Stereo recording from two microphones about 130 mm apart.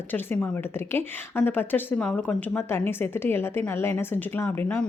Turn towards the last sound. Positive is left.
turn(degrees=15)  # may be behind; listen again after turning